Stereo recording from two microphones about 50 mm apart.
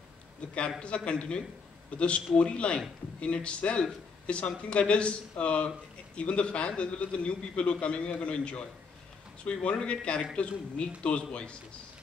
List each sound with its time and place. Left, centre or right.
0.7 s a man's voice: centre